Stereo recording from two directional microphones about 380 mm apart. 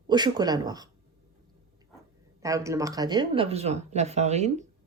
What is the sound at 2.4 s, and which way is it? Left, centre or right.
Speech, centre.